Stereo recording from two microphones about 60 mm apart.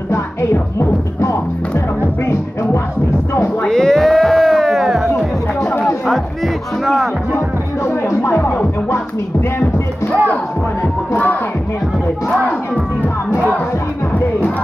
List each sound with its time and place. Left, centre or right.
0.1 s music: left
3.6 s music: centre
7.3 s music: left